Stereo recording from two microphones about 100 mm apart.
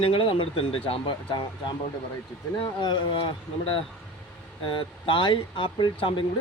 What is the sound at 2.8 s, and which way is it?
Speech, 50° left (ahead or behind).